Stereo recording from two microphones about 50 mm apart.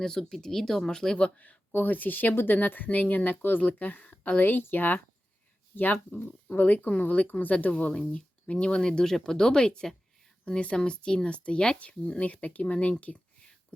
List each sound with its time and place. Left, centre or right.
0.0 s speech: centre
1.2 s speech: left